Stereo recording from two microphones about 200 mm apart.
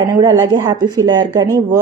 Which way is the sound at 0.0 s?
15° right (ahead or behind).